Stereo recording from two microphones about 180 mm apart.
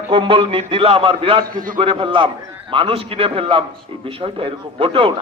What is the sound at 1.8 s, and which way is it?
Speech, 30° right (ahead or behind).